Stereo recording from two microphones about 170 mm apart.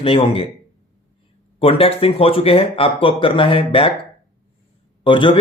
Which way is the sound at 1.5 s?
35° left (ahead or behind).